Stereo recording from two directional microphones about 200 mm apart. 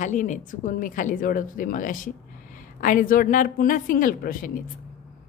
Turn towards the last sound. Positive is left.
turn(degrees=45)  # may be behind; listen again after turning